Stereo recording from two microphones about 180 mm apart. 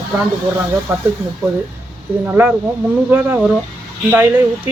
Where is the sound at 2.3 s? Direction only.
10° right (ahead or behind).